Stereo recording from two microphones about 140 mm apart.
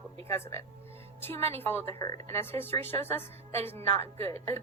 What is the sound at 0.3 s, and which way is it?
Speech, 20° left (ahead or behind).